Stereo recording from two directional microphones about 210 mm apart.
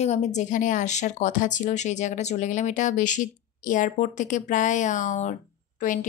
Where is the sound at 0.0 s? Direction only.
30° left (ahead or behind).